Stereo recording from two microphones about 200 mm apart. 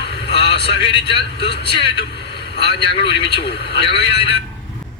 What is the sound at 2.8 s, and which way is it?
Speech, 25° left (ahead or behind).